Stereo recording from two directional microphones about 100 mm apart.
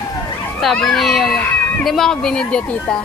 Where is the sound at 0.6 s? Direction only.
5° left (ahead or behind).